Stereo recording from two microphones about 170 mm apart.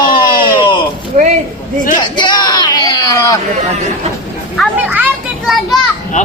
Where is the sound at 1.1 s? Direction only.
45° right (ahead or behind).